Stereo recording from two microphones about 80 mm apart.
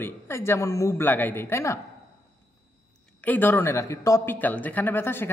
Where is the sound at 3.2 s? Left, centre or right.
Left.